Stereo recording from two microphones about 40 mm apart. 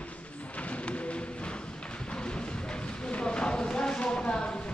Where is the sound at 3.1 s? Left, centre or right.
Left.